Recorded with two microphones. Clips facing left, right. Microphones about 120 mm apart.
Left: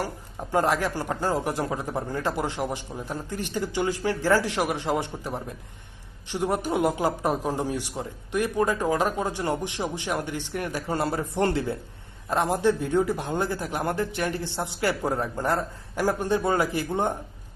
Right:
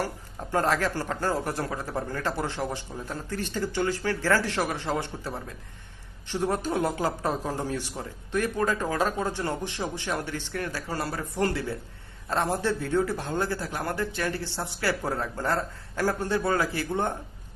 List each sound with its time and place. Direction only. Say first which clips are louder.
0.0 s speech: even; 15° left (ahead or behind)